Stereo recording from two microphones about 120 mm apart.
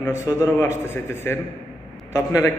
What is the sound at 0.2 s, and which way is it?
Speech, 20° left (ahead or behind).